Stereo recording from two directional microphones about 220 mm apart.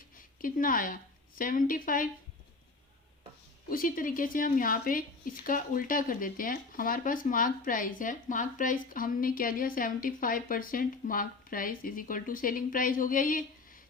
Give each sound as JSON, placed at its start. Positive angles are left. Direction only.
{"t": 0.4, "sound": "speech", "side_deg": 40}
{"t": 3.7, "sound": "speech", "side_deg": 40}